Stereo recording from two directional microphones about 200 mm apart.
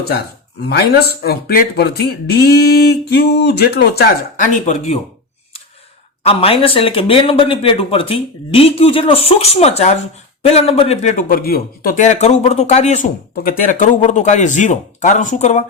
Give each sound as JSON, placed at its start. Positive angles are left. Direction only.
{"t": 0.7, "sound": "speech", "side_deg": 55}
{"t": 6.2, "sound": "speech", "side_deg": 30}